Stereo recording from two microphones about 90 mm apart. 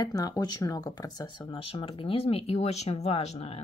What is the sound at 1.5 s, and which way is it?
Speech, 85° left.